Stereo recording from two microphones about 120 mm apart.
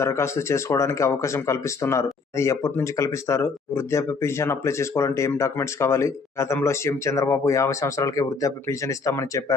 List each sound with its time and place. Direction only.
0.0 s speech: 25° left (ahead or behind)